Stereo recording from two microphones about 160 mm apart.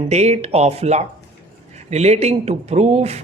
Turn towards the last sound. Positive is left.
turn(degrees=-40)  # may be behind; listen again after turning